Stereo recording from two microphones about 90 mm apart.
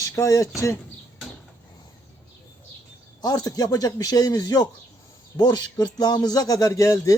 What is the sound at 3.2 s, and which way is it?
Speech, 45° left (ahead or behind).